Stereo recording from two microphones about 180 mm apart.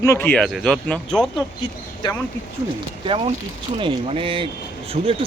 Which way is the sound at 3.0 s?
30° right (ahead or behind).